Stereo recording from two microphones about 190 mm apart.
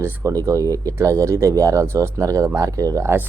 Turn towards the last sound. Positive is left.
turn(degrees=-15)  # may be behind; listen again after turning